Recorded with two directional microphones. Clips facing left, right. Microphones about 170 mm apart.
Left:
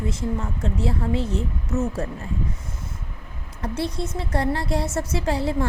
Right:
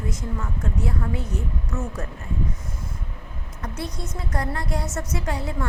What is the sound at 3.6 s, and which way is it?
A woman's voice, 30° left (ahead or behind).